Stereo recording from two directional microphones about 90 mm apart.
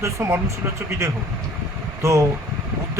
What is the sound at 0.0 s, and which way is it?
A man's voice, 30° right (ahead or behind).